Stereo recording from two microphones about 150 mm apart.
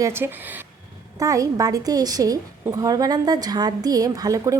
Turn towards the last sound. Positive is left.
turn(degrees=-25)  # may be behind; listen again after turning